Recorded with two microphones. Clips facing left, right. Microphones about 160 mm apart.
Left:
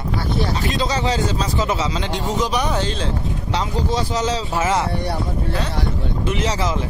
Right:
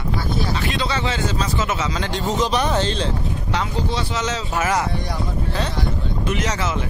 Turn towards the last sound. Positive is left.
turn(degrees=30)  # may be behind; listen again after turning